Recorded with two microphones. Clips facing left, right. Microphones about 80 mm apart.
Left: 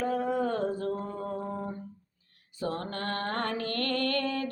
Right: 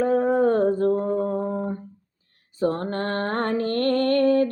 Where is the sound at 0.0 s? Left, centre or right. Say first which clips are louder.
Right 9 dB; right.